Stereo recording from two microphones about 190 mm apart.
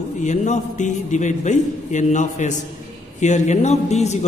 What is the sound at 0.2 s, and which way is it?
A man's voice, 40° left (ahead or behind).